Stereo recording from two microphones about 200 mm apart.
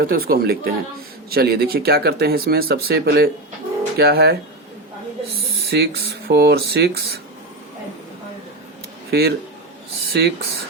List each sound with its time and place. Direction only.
0.0 s speech: 50° right (ahead or behind)
5.7 s speech: 55° right (ahead or behind)
9.0 s speech: 55° right (ahead or behind)